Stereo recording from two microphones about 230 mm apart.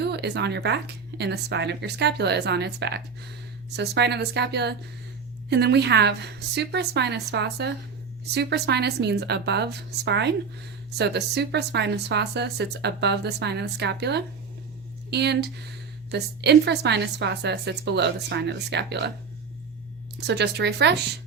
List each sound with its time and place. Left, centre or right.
0.0 s speech: right
20.1 s speech: right